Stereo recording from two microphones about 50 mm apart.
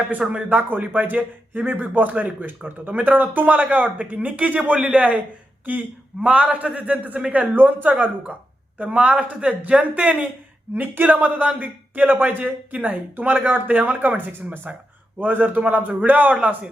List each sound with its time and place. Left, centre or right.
0.1 s a man's voice: right
6.2 s a man's voice: right
9.0 s a man's voice: right
12.4 s a man's voice: right